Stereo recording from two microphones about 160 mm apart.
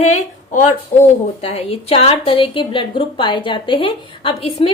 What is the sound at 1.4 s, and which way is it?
A woman's voice, 40° left (ahead or behind).